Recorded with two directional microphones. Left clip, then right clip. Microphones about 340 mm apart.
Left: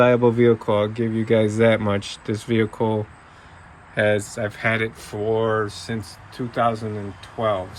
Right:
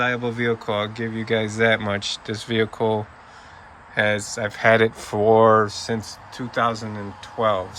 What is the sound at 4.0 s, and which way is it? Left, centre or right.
Speech, centre.